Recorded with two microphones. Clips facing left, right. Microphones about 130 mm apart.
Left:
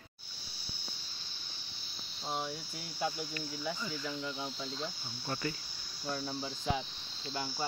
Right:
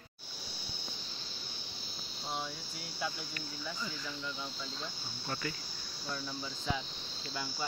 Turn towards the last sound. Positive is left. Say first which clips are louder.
# left 2 dB
turn(degrees=30)  # may be behind; listen again after turning